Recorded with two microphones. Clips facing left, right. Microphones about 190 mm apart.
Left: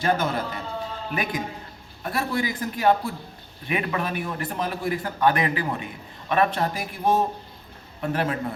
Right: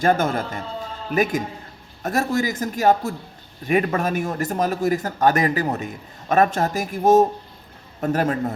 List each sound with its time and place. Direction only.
0.0 s a man's voice: 50° right (ahead or behind)